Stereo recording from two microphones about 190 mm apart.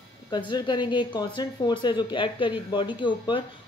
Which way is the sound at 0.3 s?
25° left (ahead or behind).